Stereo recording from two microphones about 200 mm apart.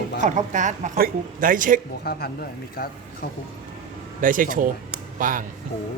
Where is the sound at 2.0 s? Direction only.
50° left (ahead or behind).